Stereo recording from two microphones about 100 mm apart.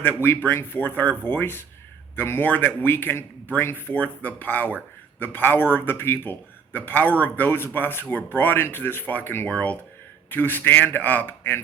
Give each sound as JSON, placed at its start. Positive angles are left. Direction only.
{"t": 0.0, "sound": "speech", "side_deg": 20}